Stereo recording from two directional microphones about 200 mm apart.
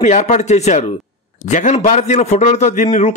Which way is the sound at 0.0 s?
35° left (ahead or behind).